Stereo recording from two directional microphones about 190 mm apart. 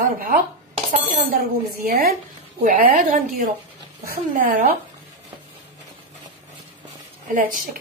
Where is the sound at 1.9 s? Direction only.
50° right (ahead or behind).